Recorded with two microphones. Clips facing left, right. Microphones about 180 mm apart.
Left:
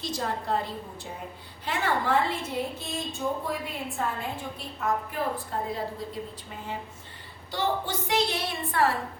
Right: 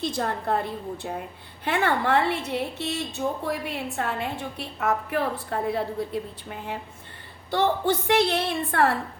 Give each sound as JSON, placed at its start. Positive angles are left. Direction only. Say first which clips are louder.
{"t": 0.0, "sound": "a woman's voice", "louder": "right 4 dB", "side_deg": -55}
{"t": 7.5, "sound": "a woman's voice", "louder": "right 6 dB", "side_deg": -60}